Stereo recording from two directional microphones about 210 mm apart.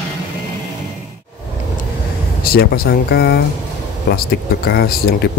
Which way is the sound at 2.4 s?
45° left (ahead or behind).